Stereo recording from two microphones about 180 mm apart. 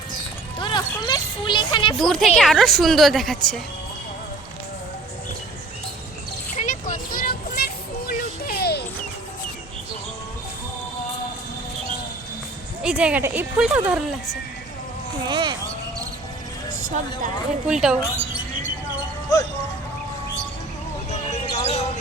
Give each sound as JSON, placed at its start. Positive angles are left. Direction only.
{"t": 0.6, "sound": "music", "side_deg": 25}
{"t": 2.0, "sound": "a woman's voice", "side_deg": 0}
{"t": 6.6, "sound": "a sound", "side_deg": 45}
{"t": 7.2, "sound": "children playing", "side_deg": 55}
{"t": 12.8, "sound": "speech", "side_deg": -5}
{"t": 15.3, "sound": "speech", "side_deg": -25}
{"t": 17.7, "sound": "a woman's voice", "side_deg": -5}
{"t": 19.3, "sound": "speech", "side_deg": 15}
{"t": 21.1, "sound": "basketball bounce", "side_deg": 40}